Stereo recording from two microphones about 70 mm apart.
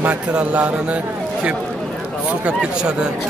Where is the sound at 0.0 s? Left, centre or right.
Centre.